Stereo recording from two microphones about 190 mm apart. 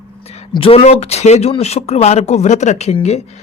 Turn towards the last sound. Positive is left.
turn(degrees=35)  # may be behind; listen again after turning